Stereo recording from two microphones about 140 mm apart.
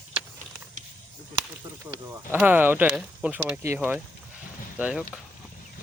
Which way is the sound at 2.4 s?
15° right (ahead or behind).